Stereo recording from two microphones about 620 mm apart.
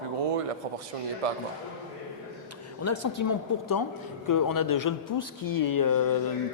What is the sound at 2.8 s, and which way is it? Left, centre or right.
Speech, left.